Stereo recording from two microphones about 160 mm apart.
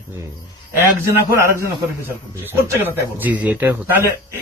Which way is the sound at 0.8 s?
15° right (ahead or behind).